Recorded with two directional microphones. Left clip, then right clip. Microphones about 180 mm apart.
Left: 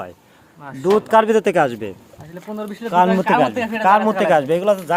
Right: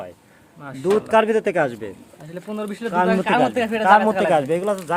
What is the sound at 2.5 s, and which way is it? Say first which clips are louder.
Speech: left 5 dB; 20° right (ahead or behind).